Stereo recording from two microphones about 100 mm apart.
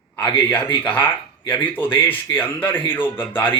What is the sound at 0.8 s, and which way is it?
Speech, 20° left (ahead or behind).